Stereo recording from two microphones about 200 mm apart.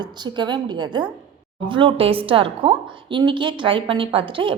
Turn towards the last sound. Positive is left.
turn(degrees=-25)  # may be behind; listen again after turning